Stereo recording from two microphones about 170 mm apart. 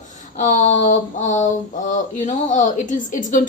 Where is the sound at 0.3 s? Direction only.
45° left (ahead or behind).